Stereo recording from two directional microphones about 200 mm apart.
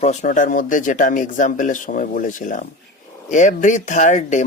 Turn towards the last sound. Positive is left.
turn(degrees=40)  # may be behind; listen again after turning